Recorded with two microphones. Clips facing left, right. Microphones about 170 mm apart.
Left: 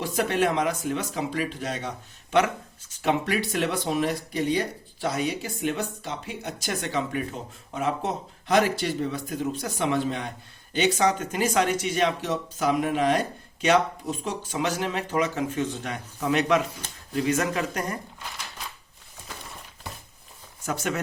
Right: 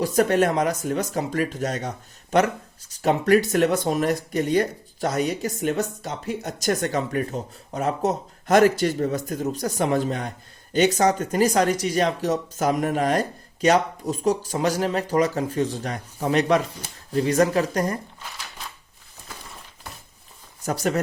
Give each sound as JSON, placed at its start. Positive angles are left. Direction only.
{"t": 0.0, "sound": "speech", "side_deg": -40}
{"t": 2.9, "sound": "speech", "side_deg": -40}
{"t": 20.7, "sound": "speech", "side_deg": -35}